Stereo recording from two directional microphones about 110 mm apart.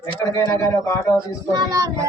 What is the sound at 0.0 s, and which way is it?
Speech, 30° left (ahead or behind).